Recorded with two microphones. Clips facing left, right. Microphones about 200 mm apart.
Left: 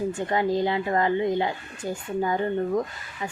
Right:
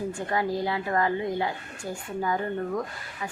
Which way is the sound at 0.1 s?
20° left (ahead or behind).